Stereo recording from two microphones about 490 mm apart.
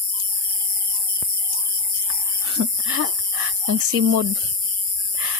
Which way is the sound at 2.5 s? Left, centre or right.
Right.